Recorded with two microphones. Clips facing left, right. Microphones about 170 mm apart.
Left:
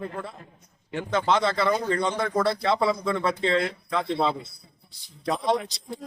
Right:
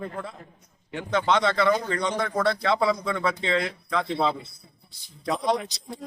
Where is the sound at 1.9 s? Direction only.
30° left (ahead or behind).